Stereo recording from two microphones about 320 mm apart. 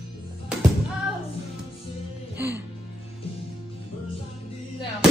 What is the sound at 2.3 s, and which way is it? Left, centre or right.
Music, centre.